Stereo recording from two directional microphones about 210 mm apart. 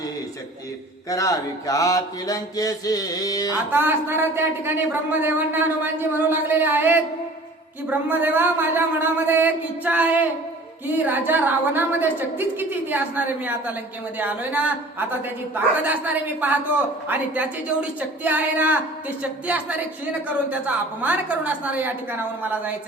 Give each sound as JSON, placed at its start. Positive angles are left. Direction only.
{"t": 1.1, "sound": "mantra", "side_deg": 15}
{"t": 3.7, "sound": "a woman's voice", "side_deg": -10}